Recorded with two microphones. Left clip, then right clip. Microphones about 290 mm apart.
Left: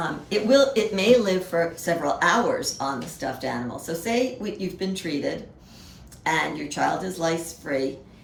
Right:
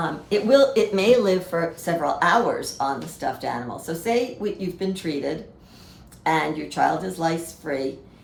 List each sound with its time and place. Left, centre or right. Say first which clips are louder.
0.0 s speech: right 2 dB; centre